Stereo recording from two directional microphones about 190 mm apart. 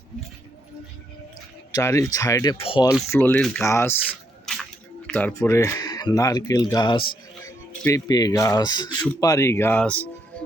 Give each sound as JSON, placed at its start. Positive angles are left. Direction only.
{"t": 1.7, "sound": "speech", "side_deg": 15}
{"t": 3.1, "sound": "speech", "side_deg": 10}
{"t": 4.5, "sound": "a sound", "side_deg": 0}
{"t": 5.1, "sound": "speech", "side_deg": 10}